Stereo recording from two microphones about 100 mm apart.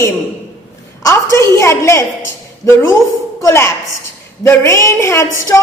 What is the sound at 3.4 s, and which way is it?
A woman's voice, 30° left (ahead or behind).